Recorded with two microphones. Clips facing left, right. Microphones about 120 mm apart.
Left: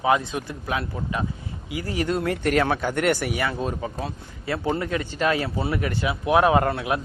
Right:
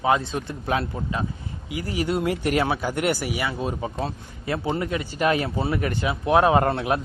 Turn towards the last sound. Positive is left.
turn(degrees=-30)  # may be behind; listen again after turning